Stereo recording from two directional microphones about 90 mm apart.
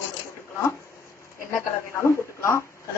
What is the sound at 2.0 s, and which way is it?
Speech, 30° left (ahead or behind).